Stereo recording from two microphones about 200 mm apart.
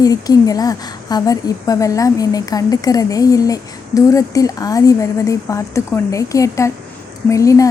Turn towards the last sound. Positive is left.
turn(degrees=15)  # may be behind; listen again after turning